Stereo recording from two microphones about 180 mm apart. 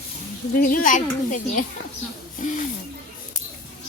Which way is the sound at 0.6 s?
50° left (ahead or behind).